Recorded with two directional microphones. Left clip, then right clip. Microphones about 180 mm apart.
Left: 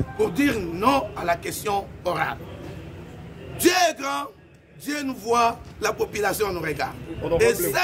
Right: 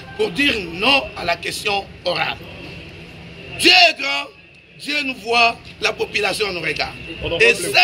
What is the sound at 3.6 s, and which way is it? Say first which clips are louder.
Speech: right 8 dB; 20° left (ahead or behind).